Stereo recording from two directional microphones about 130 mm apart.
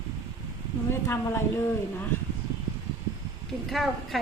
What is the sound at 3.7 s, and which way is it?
Speech, centre (ahead or behind).